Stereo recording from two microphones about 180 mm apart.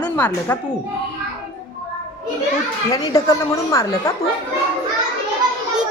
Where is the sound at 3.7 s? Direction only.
15° left (ahead or behind).